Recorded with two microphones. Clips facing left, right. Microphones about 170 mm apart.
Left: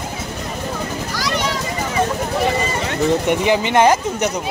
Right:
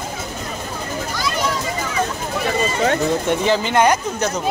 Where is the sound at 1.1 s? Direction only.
90° left.